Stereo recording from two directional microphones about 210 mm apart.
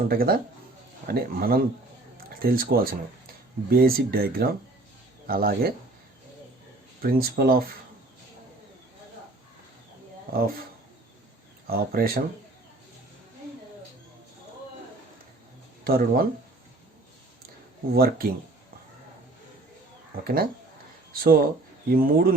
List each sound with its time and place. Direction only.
0.1 s speech: 45° right (ahead or behind)
7.0 s speech: 45° right (ahead or behind)
10.3 s speech: 45° right (ahead or behind)
11.7 s speech: 45° right (ahead or behind)
15.8 s speech: 45° right (ahead or behind)
17.9 s speech: 45° right (ahead or behind)
20.2 s speech: 45° right (ahead or behind)